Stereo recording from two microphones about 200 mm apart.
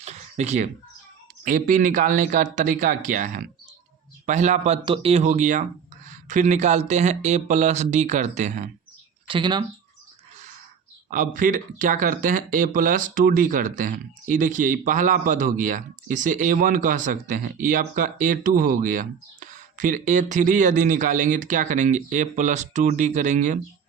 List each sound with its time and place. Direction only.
0.0 s a sound: 35° right (ahead or behind)
1.5 s speech: 45° right (ahead or behind)
9.2 s speech: 25° right (ahead or behind)
11.1 s speech: 45° right (ahead or behind)